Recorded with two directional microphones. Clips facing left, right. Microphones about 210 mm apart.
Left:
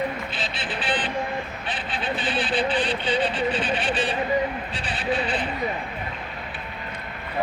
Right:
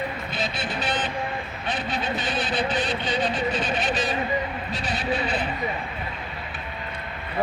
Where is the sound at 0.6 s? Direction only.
45° right (ahead or behind).